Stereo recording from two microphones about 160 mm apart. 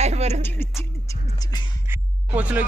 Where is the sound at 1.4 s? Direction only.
25° left (ahead or behind).